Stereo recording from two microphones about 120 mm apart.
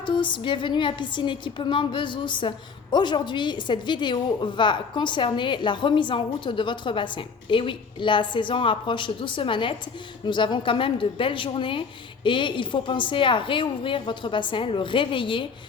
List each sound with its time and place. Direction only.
0.0 s a woman's voice: 40° left (ahead or behind)